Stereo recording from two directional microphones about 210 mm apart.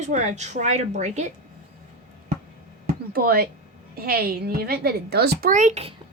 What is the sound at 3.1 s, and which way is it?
A woman's voice, 45° right (ahead or behind).